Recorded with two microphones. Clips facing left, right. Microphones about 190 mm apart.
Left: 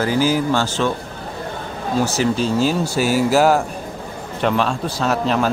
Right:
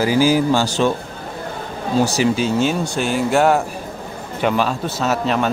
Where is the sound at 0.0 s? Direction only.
10° right (ahead or behind).